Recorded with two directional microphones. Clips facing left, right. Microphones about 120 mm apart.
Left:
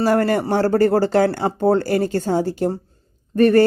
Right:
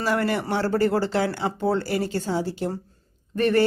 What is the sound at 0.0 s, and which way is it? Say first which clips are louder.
Speech: left 7 dB; 45° left (ahead or behind).